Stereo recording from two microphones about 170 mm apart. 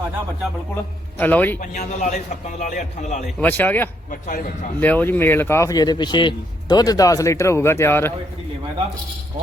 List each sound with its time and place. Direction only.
1.2 s a man's voice: 10° left (ahead or behind)
1.5 s a man's voice: 45° left (ahead or behind)
3.4 s a man's voice: 10° left (ahead or behind)
4.1 s a man's voice: 50° left (ahead or behind)
4.8 s a man's voice: 10° left (ahead or behind)